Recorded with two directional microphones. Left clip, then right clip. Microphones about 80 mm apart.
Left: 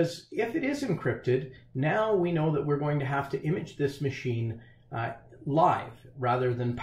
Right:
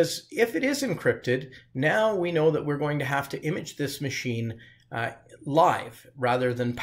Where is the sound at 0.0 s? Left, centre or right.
Right.